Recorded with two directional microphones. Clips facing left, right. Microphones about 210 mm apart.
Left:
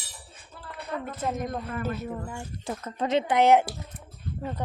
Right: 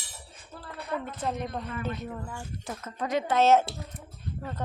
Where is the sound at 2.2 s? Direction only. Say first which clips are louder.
Left 3 dB; 25° left (ahead or behind).